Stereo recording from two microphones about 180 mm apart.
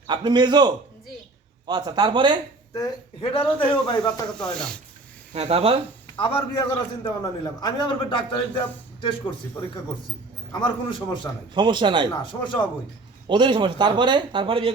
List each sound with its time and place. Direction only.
0.1 s speech: 25° right (ahead or behind)
2.7 s a man's voice: 25° left (ahead or behind)
4.4 s speech: 5° left (ahead or behind)
5.3 s speech: 35° right (ahead or behind)
6.1 s a man's voice: 30° left (ahead or behind)
10.5 s a man's voice: 25° left (ahead or behind)
11.5 s speech: 25° right (ahead or behind)
12.2 s a man's voice: 25° left (ahead or behind)
13.2 s speech: 25° right (ahead or behind)